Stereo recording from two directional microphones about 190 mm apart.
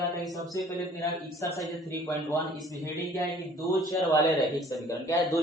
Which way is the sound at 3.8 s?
20° left (ahead or behind).